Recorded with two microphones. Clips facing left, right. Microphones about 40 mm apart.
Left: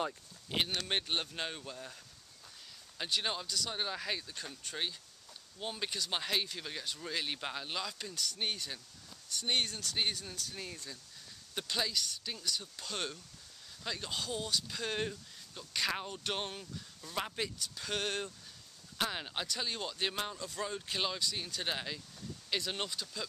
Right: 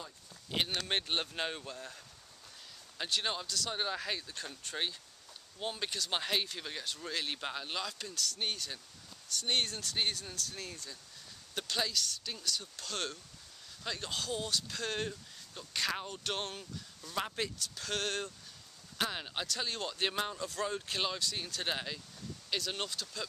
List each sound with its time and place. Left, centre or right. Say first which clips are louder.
0.7 s speech: right 1 dB; centre
3.0 s speech: even; centre
8.1 s speech: even; centre